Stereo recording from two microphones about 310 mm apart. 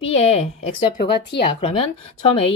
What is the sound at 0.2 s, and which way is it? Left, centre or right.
Speech, centre.